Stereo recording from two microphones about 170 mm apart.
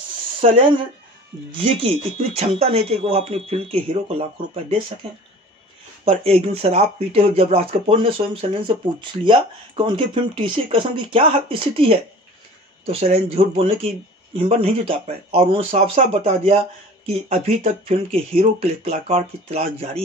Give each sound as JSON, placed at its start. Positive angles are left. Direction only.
{"t": 0.4, "sound": "speech", "side_deg": -30}
{"t": 6.0, "sound": "speech", "side_deg": -35}